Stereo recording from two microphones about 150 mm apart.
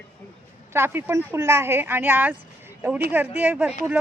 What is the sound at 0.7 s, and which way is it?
A woman's voice, 15° right (ahead or behind).